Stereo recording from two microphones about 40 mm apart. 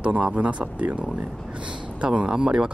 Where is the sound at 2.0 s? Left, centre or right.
Right.